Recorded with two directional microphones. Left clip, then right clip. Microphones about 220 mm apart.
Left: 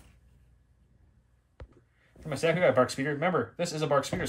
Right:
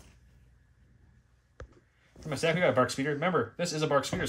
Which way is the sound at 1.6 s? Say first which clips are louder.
Right 3 dB; 30° left (ahead or behind).